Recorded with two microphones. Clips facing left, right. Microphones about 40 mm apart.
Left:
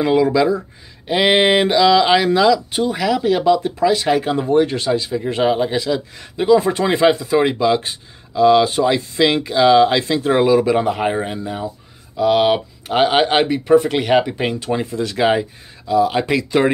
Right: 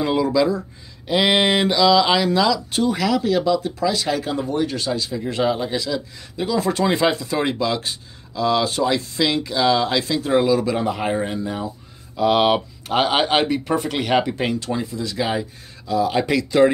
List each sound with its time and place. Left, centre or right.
0.0 s speech: left
3.2 s speech: left; by 11.7 s centre
12.2 s speech: centre
14.3 s speech: left
14.9 s speech: left
15.9 s speech: centre